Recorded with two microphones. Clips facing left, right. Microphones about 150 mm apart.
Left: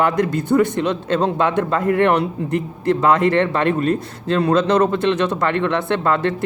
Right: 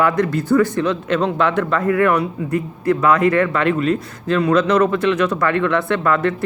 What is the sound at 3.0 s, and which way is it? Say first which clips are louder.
Speech: even; 25° left (ahead or behind).